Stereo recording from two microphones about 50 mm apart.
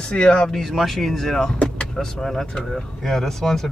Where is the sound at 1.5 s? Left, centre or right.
Left.